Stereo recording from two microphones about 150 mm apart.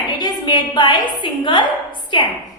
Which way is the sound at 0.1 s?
30° left (ahead or behind).